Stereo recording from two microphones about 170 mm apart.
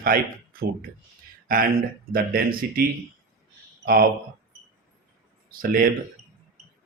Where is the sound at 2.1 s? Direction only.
55° right (ahead or behind).